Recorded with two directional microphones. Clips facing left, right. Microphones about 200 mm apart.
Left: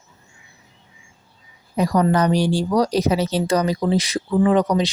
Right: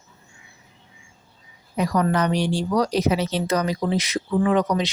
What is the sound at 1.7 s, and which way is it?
Speech, 35° left (ahead or behind).